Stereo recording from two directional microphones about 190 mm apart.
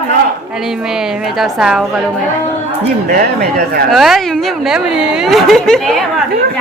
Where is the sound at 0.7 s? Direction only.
Centre (ahead or behind).